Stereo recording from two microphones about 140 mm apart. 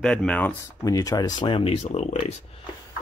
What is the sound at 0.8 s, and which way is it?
Speech, 25° left (ahead or behind).